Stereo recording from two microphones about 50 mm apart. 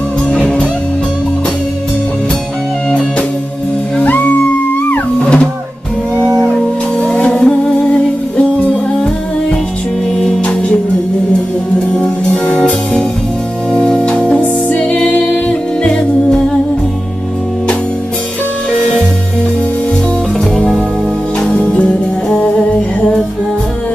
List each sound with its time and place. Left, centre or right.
0.3 s music: centre
4.0 s music: left
5.2 s drum: left
7.2 s music: centre
10.1 s music: centre
12.4 s music: centre
13.7 s organ: centre
14.8 s a capella: left
21.5 s music: centre